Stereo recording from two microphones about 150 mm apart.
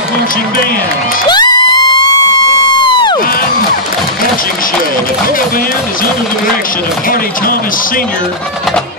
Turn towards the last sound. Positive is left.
turn(degrees=70)  # may be behind; listen again after turning